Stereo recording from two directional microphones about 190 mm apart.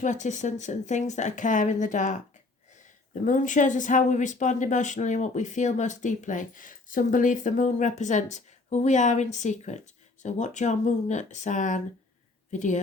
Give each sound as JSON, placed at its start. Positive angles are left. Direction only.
{"t": 0.0, "sound": "speech", "side_deg": 40}